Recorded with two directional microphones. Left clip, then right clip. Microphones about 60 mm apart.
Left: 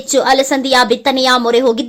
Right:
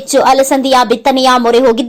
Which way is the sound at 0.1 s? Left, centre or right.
Right.